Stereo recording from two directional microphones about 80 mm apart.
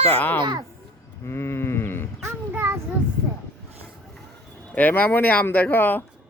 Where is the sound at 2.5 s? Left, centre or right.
Right.